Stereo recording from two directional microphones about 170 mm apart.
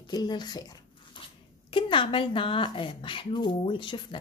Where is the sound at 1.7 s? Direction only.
30° left (ahead or behind).